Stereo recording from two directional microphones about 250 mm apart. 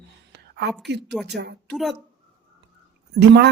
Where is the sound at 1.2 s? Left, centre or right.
Right.